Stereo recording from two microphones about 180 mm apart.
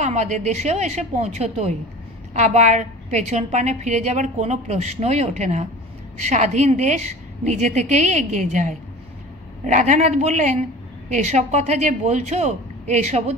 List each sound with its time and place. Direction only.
0.0 s a woman's voice: 40° right (ahead or behind)